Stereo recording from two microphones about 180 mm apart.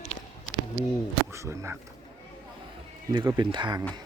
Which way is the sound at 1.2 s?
15° right (ahead or behind).